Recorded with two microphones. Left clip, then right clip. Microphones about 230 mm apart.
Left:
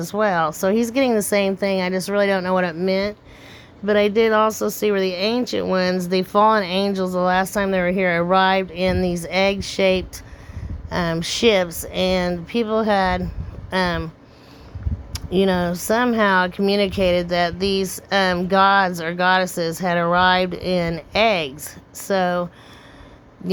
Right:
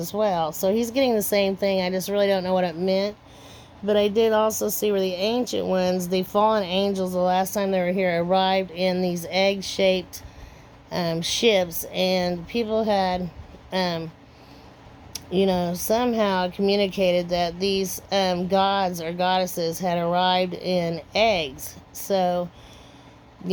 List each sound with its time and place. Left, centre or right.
0.0 s speech: left
15.1 s speech: left